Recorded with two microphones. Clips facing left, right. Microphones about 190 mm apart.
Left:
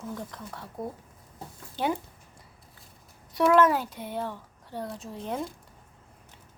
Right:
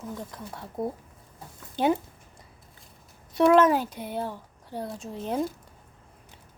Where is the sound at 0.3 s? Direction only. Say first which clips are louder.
Right 2 dB; 15° right (ahead or behind).